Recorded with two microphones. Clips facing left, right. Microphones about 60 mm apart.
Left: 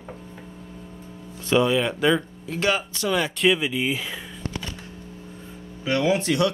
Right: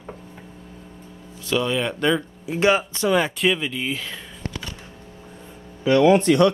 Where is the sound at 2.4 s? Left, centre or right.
Right.